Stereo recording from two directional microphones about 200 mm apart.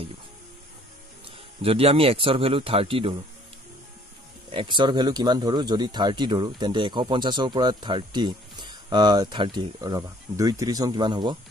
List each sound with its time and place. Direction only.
1.6 s speech: 30° right (ahead or behind)
4.5 s speech: 25° right (ahead or behind)